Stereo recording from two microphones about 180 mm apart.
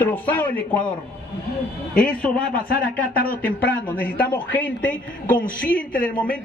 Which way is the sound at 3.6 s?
10° left (ahead or behind).